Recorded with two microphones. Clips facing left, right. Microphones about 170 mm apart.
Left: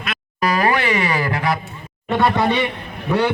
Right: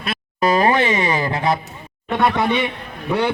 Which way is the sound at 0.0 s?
30° right (ahead or behind).